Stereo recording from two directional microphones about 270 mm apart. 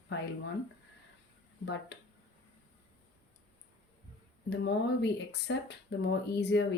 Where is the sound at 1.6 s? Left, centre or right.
Left.